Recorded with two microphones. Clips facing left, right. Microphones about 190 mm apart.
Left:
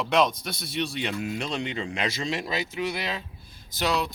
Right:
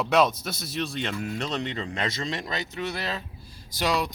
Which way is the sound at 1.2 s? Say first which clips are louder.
Even; 15° left (ahead or behind).